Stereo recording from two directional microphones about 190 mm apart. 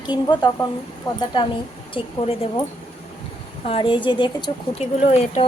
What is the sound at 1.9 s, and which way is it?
Speech, 30° left (ahead or behind).